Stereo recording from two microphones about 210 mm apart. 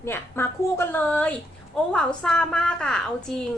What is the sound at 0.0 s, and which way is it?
A woman's voice, 10° left (ahead or behind).